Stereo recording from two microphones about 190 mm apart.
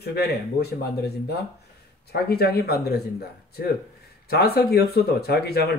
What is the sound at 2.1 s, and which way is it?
Speech, 55° left (ahead or behind).